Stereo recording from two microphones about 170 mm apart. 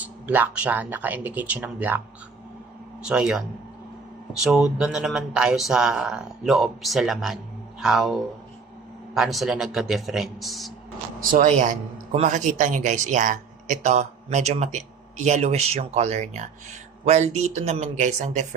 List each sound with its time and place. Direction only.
0.0 s speech: 10° right (ahead or behind)
3.0 s speech: 5° right (ahead or behind)
4.4 s speech: centre (ahead or behind)
7.8 s a sound: centre (ahead or behind)
9.1 s speech: centre (ahead or behind)
11.2 s speech: 50° right (ahead or behind)